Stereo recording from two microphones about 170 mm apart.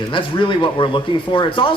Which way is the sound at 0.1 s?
30° left (ahead or behind).